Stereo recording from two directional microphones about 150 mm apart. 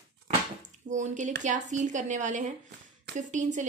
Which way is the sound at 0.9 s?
55° right (ahead or behind).